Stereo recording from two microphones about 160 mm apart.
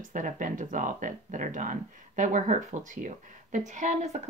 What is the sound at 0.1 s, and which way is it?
Speech, 55° right (ahead or behind).